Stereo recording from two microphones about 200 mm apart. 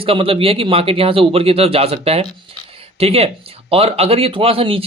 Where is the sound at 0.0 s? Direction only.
25° right (ahead or behind).